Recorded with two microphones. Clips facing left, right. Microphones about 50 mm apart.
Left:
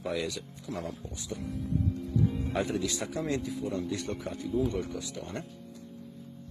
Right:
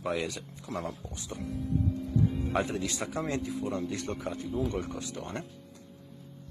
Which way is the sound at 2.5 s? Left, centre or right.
Right.